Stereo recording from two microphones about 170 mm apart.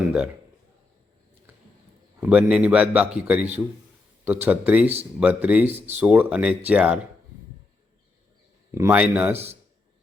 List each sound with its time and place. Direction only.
2.2 s a man's voice: 5° right (ahead or behind)
5.7 s speech: 40° right (ahead or behind)
6.0 s a man's voice: 10° right (ahead or behind)
8.7 s a man's voice: 15° right (ahead or behind)